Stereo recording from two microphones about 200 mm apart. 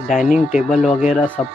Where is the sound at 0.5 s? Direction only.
Centre (ahead or behind).